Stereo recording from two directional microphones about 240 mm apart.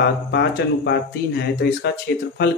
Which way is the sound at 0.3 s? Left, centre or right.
Left.